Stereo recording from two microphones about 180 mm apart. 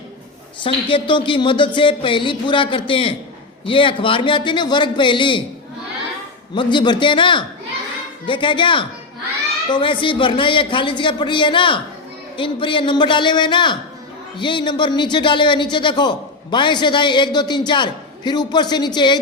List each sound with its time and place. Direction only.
0.6 s speech: 30° left (ahead or behind)
6.5 s speech: 25° left (ahead or behind)